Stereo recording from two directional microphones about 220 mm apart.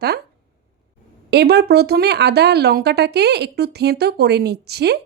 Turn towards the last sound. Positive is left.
turn(degrees=-50)  # may be behind; listen again after turning